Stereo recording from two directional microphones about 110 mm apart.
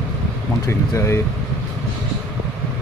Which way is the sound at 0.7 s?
25° left (ahead or behind).